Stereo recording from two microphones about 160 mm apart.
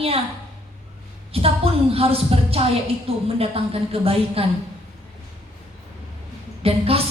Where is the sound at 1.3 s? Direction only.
35° right (ahead or behind).